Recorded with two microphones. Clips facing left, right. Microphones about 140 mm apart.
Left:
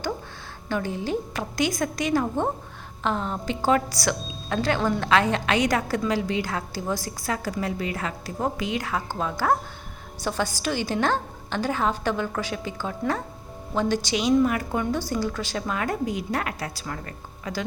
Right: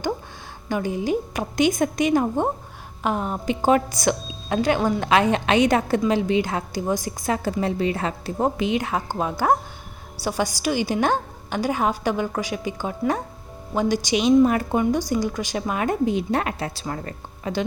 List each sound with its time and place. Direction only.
0.7 s a woman's voice: 15° right (ahead or behind)
14.4 s a woman's voice: 30° right (ahead or behind)
14.8 s a woman's voice: 15° right (ahead or behind)